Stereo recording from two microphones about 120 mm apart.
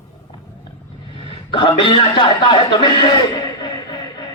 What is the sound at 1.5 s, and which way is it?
Speech, 45° left (ahead or behind).